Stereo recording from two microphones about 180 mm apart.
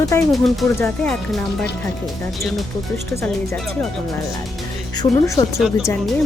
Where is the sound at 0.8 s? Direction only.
5° left (ahead or behind).